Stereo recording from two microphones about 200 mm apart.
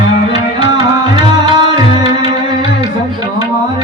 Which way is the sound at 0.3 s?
25° right (ahead or behind).